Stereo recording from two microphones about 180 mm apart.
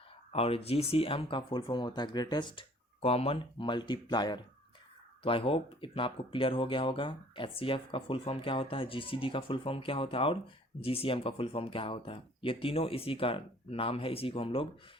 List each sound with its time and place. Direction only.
0.3 s speech: 30° left (ahead or behind)